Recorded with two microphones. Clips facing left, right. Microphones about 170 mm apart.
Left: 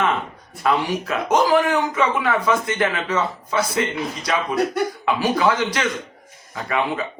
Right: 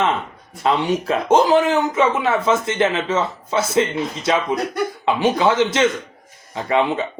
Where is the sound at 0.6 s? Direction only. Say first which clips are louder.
Right 2 dB; 25° right (ahead or behind).